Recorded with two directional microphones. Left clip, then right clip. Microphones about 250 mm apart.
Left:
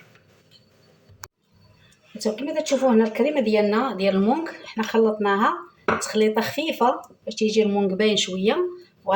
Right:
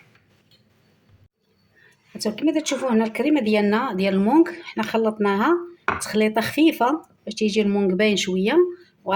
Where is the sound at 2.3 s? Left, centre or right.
Right.